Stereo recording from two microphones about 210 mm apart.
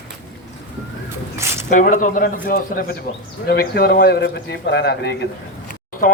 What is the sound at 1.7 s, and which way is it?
A man's voice, 40° left (ahead or behind).